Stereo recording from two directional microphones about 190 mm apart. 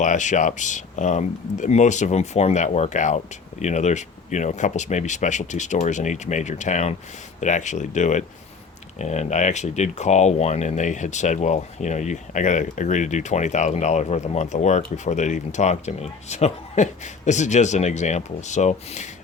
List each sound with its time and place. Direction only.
0.0 s speech: 40° left (ahead or behind)